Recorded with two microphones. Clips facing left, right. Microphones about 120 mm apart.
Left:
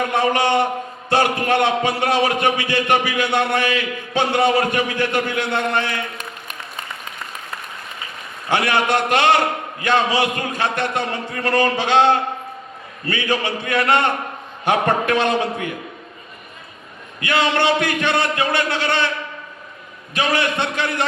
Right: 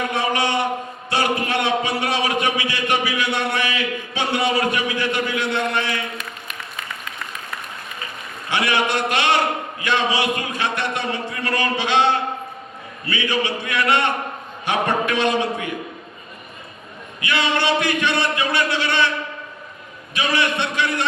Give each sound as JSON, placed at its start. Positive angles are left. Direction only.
{"t": 0.1, "sound": "a sound", "side_deg": 50}
{"t": 1.1, "sound": "a man's voice", "side_deg": 50}
{"t": 8.4, "sound": "a man's voice", "side_deg": 50}
{"t": 17.2, "sound": "a man's voice", "side_deg": 50}
{"t": 20.1, "sound": "a man's voice", "side_deg": 50}